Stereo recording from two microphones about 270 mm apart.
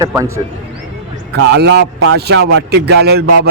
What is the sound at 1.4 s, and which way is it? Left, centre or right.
Speech, right.